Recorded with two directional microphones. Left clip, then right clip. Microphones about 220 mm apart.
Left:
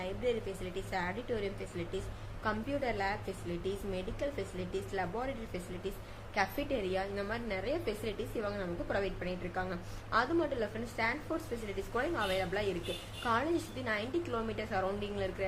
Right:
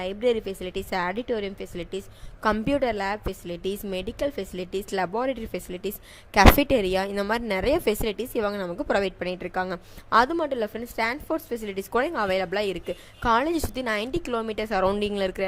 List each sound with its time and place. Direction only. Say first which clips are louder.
0.0 s a woman's voice: right 10 dB; 50° right (ahead or behind)